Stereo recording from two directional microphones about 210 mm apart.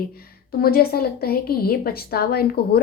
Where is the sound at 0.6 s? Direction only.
45° left (ahead or behind).